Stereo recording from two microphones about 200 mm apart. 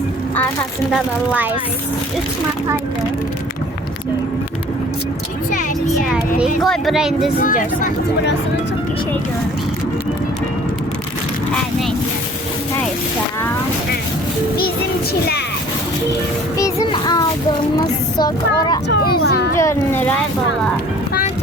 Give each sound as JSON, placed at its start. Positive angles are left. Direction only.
{"t": 0.9, "sound": "speech", "side_deg": -5}
{"t": 5.5, "sound": "speech", "side_deg": 40}
{"t": 6.1, "sound": "speech", "side_deg": -5}
{"t": 7.3, "sound": "speech", "side_deg": 45}
{"t": 16.6, "sound": "a child's voice", "side_deg": 20}
{"t": 19.2, "sound": "speech", "side_deg": 55}
{"t": 19.5, "sound": "speech", "side_deg": 10}